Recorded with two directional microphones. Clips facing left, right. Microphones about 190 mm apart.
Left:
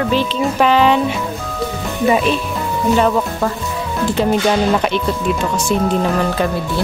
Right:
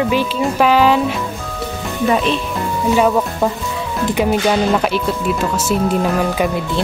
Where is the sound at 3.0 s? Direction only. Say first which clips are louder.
Right 1 dB; 5° right (ahead or behind).